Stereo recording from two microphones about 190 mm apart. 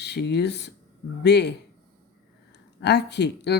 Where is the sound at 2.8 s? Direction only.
65° left (ahead or behind).